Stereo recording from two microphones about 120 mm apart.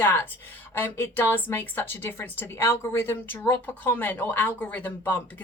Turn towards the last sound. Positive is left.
turn(degrees=15)  # may be behind; listen again after turning